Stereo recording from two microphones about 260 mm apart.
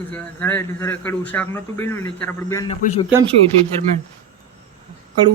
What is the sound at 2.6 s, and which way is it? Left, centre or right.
Speech, left.